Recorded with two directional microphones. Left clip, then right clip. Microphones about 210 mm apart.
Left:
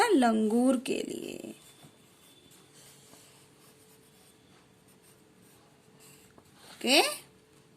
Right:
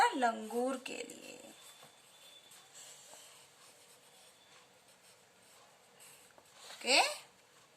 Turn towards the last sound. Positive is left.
turn(degrees=40)  # may be behind; listen again after turning